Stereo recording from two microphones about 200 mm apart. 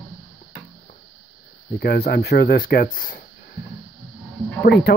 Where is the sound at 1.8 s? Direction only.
50° left (ahead or behind).